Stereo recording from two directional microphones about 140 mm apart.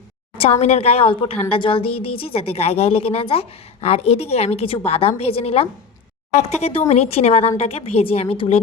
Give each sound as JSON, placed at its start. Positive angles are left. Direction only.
{"t": 0.6, "sound": "a woman's voice", "side_deg": 45}